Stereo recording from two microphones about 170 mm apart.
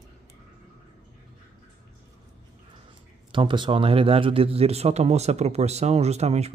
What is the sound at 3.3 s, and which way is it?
Speech, 30° right (ahead or behind).